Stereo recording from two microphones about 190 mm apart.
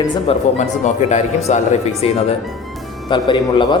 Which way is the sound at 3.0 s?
25° left (ahead or behind).